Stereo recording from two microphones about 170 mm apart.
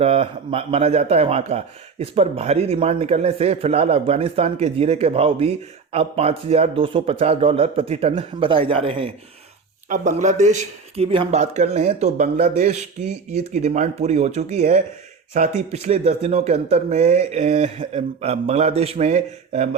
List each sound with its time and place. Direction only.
0.0 s speech: 35° right (ahead or behind)
9.9 s speech: 45° right (ahead or behind)